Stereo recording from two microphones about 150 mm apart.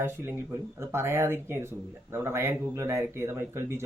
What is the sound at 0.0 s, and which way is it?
Speech, 15° right (ahead or behind).